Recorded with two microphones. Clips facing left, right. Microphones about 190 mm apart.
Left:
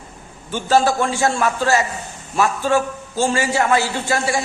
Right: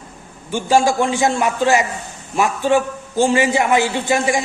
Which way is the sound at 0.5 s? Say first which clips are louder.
Right 1 dB; 15° right (ahead or behind).